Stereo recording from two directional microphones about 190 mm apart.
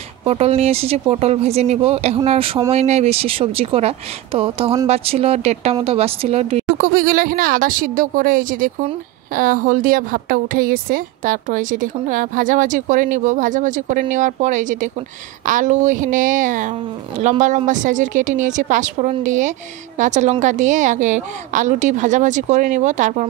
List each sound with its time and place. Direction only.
0.2 s a woman's voice: 30° right (ahead or behind)
6.8 s a woman's voice: 50° right (ahead or behind)